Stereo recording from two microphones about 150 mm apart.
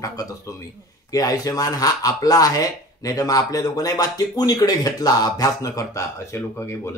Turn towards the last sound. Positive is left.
turn(degrees=15)  # may be behind; listen again after turning